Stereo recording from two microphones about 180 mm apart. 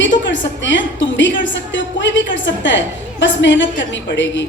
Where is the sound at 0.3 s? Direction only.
90° left.